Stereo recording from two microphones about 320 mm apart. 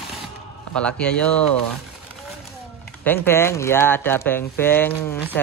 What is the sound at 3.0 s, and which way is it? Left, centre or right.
Speech, centre.